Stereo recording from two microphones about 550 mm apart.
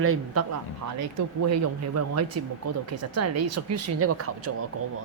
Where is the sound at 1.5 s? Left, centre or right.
Right.